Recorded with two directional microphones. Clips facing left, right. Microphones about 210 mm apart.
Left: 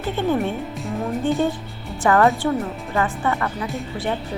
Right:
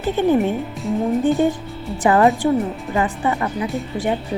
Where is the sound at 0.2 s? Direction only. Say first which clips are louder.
Right 5 dB; 15° right (ahead or behind).